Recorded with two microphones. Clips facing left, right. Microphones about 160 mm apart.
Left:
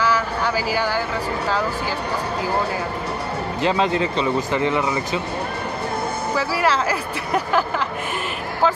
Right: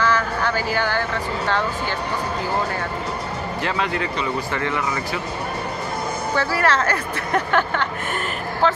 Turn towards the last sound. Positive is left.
turn(degrees=5)  # may be behind; listen again after turning